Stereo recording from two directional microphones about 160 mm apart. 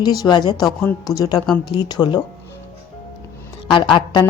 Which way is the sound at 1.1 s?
25° left (ahead or behind).